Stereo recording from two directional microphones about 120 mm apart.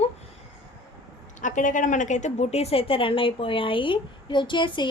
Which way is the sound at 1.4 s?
90° left.